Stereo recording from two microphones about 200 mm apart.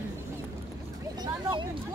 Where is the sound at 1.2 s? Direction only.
20° right (ahead or behind).